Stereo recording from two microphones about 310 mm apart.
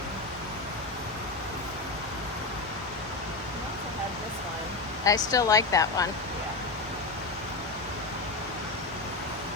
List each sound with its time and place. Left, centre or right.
5.0 s speech: centre